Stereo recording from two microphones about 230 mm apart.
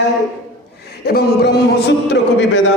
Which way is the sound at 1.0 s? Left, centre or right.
Left.